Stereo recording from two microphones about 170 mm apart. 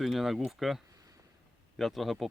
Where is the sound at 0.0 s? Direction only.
Centre (ahead or behind).